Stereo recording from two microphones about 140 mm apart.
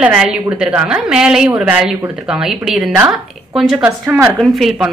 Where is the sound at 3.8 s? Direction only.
20° right (ahead or behind).